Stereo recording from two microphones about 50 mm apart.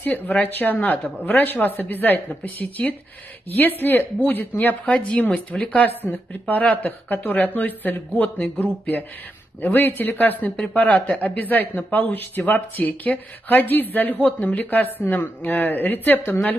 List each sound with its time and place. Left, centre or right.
0.0 s speech: left
4.8 s speech: left